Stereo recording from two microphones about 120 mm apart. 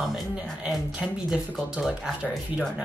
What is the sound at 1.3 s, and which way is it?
Speech, 5° right (ahead or behind).